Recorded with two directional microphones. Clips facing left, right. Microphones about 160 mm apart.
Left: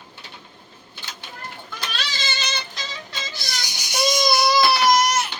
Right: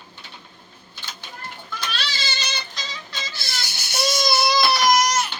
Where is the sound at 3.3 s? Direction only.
15° left (ahead or behind).